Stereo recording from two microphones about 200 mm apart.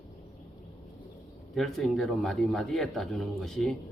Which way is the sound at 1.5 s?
Centre (ahead or behind).